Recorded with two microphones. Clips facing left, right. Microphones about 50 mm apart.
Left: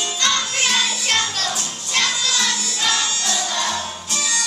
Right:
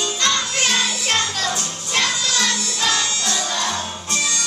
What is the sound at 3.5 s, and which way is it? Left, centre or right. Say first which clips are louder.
Music: even; centre.